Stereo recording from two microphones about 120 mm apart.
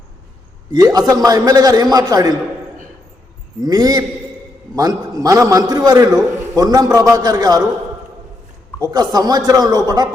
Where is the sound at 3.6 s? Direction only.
30° right (ahead or behind).